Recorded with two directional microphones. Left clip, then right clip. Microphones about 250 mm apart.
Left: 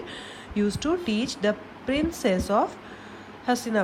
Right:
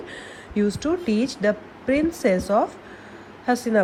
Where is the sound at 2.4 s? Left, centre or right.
Left.